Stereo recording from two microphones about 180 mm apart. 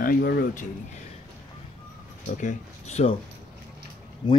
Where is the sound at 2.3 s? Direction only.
45° left (ahead or behind).